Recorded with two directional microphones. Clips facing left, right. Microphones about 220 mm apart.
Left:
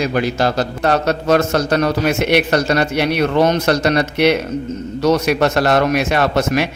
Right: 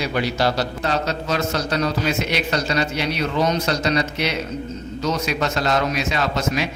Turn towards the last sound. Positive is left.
turn(degrees=65)  # may be behind; listen again after turning